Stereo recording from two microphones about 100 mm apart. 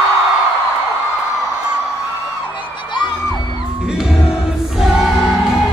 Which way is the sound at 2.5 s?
55° left (ahead or behind).